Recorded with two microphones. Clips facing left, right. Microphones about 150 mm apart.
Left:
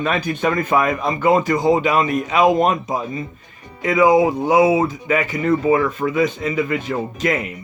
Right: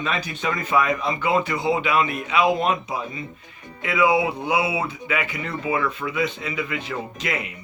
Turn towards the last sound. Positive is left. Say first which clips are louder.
# left 8 dB
turn(degrees=45)  # may be behind; listen again after turning